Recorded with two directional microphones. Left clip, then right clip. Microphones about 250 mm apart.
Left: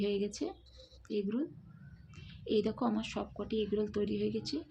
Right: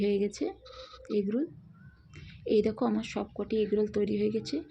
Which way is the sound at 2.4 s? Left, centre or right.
Centre.